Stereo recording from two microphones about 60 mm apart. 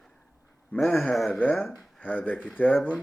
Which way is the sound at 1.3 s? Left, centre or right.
Left.